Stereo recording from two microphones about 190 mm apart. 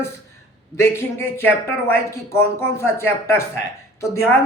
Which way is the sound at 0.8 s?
10° left (ahead or behind).